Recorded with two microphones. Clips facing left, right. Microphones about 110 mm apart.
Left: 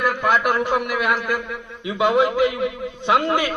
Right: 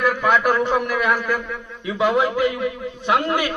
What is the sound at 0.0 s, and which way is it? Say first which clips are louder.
A man's voice: right 1 dB; centre (ahead or behind).